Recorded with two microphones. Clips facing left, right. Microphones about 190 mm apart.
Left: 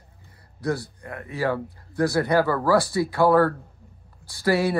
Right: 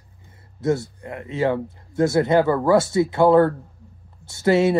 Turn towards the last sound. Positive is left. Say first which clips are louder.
# right 5 dB
turn(degrees=-25)  # may be behind; listen again after turning